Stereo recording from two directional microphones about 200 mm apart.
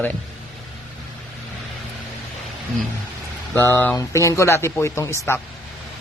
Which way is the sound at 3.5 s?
10° left (ahead or behind).